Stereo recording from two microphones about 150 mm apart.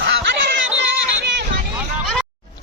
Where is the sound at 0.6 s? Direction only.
10° right (ahead or behind).